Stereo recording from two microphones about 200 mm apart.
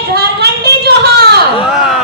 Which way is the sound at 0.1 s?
55° right (ahead or behind).